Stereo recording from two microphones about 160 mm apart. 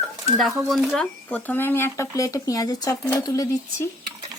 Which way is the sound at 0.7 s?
Centre (ahead or behind).